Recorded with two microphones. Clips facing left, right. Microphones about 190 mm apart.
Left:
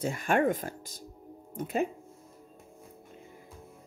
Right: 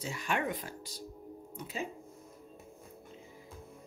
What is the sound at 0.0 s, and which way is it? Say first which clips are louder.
Speech: left 8 dB; 50° left (ahead or behind).